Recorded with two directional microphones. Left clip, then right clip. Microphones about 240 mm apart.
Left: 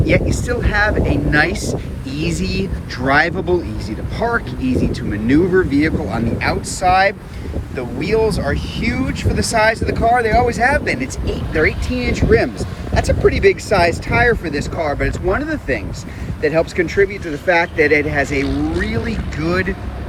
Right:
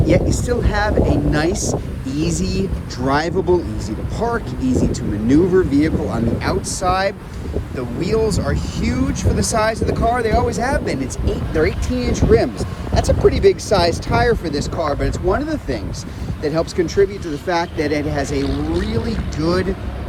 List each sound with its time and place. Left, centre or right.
0.0 s speech: centre
19.4 s speech: centre